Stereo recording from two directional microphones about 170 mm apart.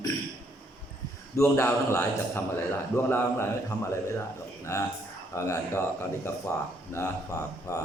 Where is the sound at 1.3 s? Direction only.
15° left (ahead or behind).